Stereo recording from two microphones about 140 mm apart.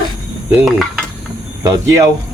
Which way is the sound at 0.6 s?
Centre (ahead or behind).